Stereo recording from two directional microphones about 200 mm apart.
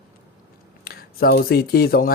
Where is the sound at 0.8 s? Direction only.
50° left (ahead or behind).